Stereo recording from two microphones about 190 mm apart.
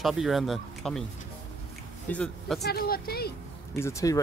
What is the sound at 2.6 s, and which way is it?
Speech, 55° left (ahead or behind).